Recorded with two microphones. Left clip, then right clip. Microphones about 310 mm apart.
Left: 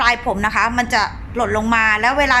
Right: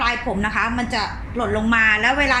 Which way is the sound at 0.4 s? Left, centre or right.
Centre.